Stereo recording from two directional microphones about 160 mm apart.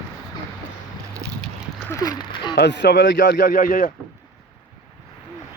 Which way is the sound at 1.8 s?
20° left (ahead or behind).